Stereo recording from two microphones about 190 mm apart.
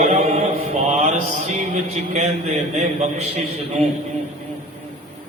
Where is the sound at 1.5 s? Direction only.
35° right (ahead or behind).